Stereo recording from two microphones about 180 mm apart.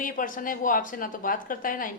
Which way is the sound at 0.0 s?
50° left (ahead or behind).